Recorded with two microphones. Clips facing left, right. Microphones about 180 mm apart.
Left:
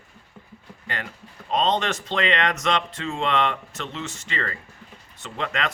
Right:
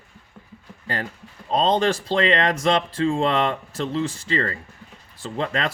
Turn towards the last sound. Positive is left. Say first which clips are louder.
# right 3 dB
turn(degrees=-35)  # may be behind; listen again after turning